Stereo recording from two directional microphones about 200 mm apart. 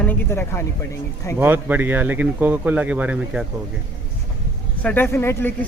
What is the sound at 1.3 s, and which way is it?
Speech, 10° right (ahead or behind).